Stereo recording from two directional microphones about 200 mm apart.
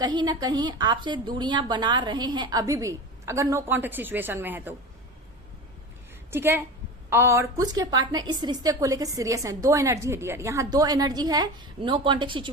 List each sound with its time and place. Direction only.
0.0 s a woman's voice: 20° right (ahead or behind)
6.3 s a woman's voice: 10° right (ahead or behind)